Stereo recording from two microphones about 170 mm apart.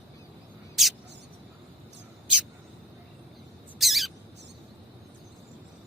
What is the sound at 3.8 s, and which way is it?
Owl, centre (ahead or behind).